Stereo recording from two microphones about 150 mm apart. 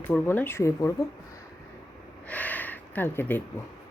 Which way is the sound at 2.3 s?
10° left (ahead or behind).